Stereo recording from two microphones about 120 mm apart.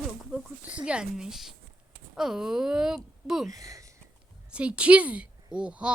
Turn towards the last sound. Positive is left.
turn(degrees=-10)  # may be behind; listen again after turning